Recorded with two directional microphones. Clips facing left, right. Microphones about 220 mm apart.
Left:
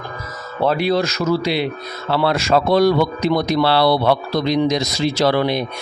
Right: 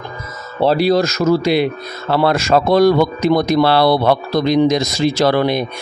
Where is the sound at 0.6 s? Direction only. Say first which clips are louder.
Right 4 dB; 35° right (ahead or behind).